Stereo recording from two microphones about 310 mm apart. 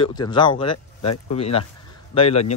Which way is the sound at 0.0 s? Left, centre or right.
Centre.